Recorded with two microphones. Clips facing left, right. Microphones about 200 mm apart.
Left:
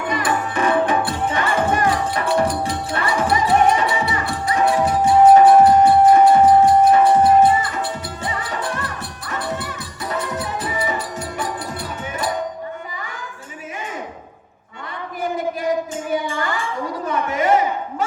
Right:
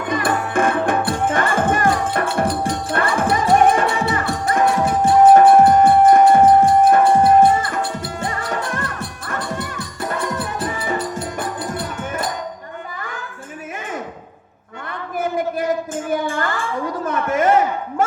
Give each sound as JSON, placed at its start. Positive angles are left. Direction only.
{"t": 0.1, "sound": "music", "side_deg": -50}
{"t": 16.2, "sound": "music", "side_deg": -50}
{"t": 17.1, "sound": "a sound", "side_deg": -50}